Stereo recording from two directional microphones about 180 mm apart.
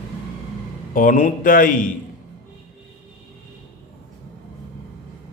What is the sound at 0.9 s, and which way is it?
Speech, 50° left (ahead or behind).